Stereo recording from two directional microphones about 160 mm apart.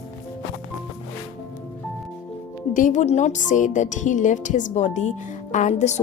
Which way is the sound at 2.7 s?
50° left (ahead or behind).